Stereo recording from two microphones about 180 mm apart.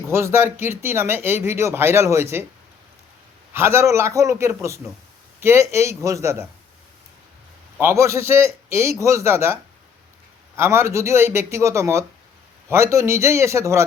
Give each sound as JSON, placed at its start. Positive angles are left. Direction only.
{"t": 0.1, "sound": "speech", "side_deg": -15}
{"t": 3.5, "sound": "speech", "side_deg": -15}
{"t": 7.8, "sound": "speech", "side_deg": -15}
{"t": 10.6, "sound": "speech", "side_deg": -15}